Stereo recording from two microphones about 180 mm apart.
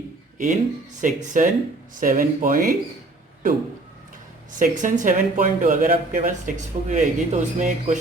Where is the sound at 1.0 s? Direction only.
45° right (ahead or behind).